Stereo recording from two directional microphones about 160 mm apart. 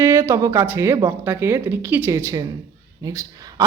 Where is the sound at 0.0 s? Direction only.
15° right (ahead or behind).